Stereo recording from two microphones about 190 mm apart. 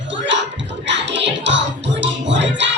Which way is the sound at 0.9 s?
70° right (ahead or behind).